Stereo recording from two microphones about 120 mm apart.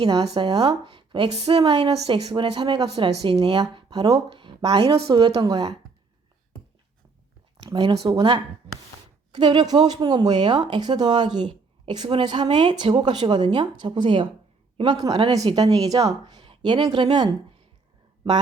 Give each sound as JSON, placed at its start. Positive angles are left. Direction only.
{"t": 0.0, "sound": "a woman's voice", "side_deg": -40}
{"t": 1.3, "sound": "a woman's voice", "side_deg": -60}
{"t": 1.5, "sound": "a woman's voice", "side_deg": -35}
{"t": 1.9, "sound": "a woman's voice", "side_deg": -60}
{"t": 2.2, "sound": "a woman's voice", "side_deg": -45}
{"t": 7.6, "sound": "a woman's voice", "side_deg": -35}